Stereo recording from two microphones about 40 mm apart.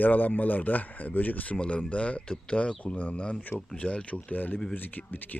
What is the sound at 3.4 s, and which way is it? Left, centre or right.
Speech, left.